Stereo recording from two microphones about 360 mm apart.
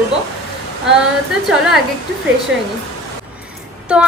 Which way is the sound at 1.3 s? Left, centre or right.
Centre.